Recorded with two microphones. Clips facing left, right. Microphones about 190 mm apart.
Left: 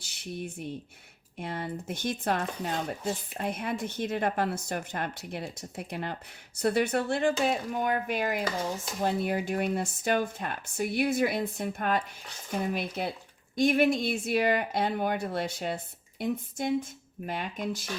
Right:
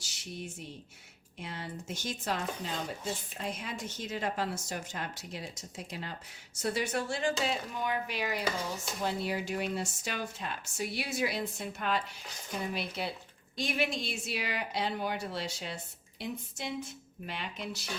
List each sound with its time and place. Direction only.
0.0 s speech: 60° left (ahead or behind)